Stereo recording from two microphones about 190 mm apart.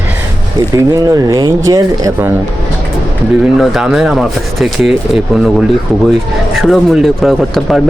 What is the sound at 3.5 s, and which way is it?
Speech, centre (ahead or behind).